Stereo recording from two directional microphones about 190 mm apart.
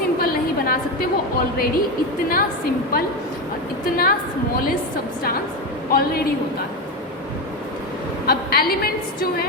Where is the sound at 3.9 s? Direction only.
50° left (ahead or behind).